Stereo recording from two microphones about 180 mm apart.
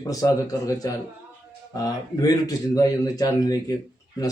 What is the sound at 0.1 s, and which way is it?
Speech, 20° left (ahead or behind).